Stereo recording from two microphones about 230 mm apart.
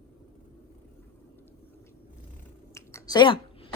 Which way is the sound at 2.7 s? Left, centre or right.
Centre.